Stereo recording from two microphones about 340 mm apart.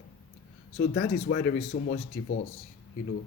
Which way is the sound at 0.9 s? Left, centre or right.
Left.